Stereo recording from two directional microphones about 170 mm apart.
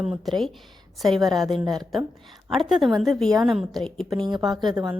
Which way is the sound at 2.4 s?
Centre (ahead or behind).